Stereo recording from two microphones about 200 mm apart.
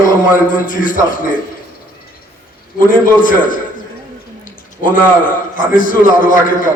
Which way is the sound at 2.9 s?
40° left (ahead or behind).